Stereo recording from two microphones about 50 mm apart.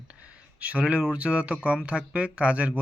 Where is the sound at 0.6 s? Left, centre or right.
Right.